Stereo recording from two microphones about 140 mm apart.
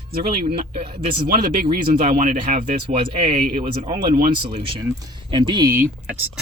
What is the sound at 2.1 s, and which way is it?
Speech, 70° right (ahead or behind).